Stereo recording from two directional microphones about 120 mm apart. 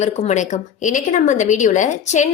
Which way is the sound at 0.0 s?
75° left (ahead or behind).